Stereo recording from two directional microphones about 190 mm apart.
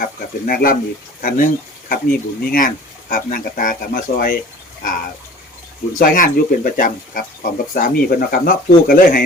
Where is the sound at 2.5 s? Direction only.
45° left (ahead or behind).